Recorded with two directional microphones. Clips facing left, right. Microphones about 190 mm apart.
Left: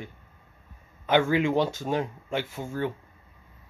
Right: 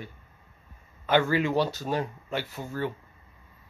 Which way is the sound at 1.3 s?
20° left (ahead or behind).